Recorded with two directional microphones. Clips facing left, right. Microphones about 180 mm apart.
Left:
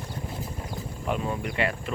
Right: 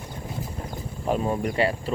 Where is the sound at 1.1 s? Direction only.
35° right (ahead or behind).